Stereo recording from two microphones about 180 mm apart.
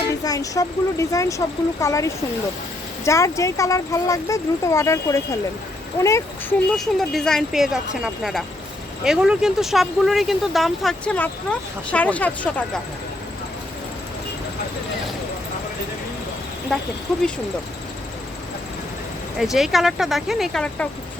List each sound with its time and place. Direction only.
0.3 s speech: 20° left (ahead or behind)
19.4 s speech: centre (ahead or behind)